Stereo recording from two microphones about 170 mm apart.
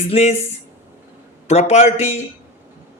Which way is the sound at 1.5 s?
40° left (ahead or behind).